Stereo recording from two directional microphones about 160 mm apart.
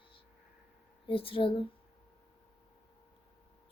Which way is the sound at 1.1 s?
35° left (ahead or behind).